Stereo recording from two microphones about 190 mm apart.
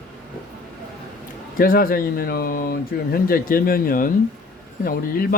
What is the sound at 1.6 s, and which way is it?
Speech, 50° left (ahead or behind).